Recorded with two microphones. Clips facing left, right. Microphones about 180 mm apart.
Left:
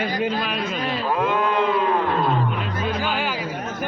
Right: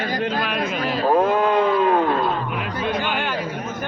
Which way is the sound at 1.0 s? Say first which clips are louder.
Right 6 dB; 40° right (ahead or behind).